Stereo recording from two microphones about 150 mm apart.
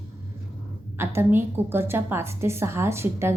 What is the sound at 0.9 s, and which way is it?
A woman's voice, 15° right (ahead or behind).